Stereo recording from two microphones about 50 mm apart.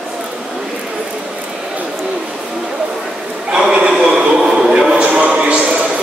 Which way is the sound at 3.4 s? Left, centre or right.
Centre.